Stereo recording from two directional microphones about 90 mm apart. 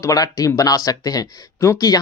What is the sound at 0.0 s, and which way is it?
Speech, 40° left (ahead or behind).